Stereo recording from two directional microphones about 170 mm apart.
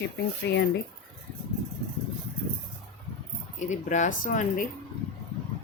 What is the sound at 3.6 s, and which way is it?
Speech, 45° left (ahead or behind).